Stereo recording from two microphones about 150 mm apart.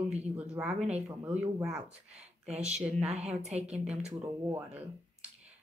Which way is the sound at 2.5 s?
45° right (ahead or behind).